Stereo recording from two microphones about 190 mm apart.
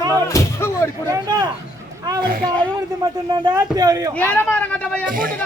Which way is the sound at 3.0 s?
20° right (ahead or behind).